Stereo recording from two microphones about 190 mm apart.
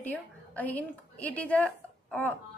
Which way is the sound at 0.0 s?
10° left (ahead or behind).